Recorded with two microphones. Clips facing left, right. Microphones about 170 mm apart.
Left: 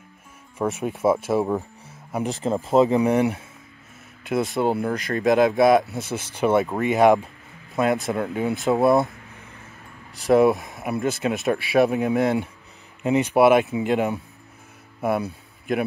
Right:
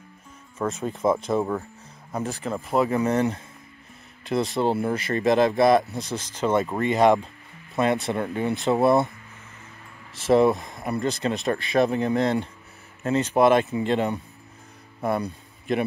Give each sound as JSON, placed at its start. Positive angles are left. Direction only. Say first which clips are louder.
{"t": 0.6, "sound": "speech", "louder": "left 2 dB", "side_deg": 15}
{"t": 1.4, "sound": "speech", "louder": "left 3 dB", "side_deg": 15}
{"t": 4.2, "sound": "speech", "louder": "left 1 dB", "side_deg": 0}
{"t": 10.1, "sound": "a man's voice", "louder": "left 2 dB", "side_deg": 0}